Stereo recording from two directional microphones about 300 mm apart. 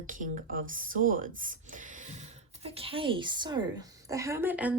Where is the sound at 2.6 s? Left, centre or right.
Centre.